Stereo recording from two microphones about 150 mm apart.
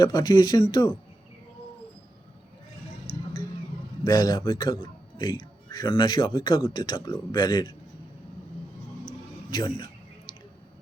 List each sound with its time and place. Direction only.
0.0 s speech: 30° left (ahead or behind)
4.0 s a man's voice: 25° left (ahead or behind)
9.5 s speech: 30° left (ahead or behind)